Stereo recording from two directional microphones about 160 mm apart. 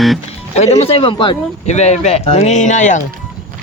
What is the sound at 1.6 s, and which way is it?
Speech, 45° left (ahead or behind).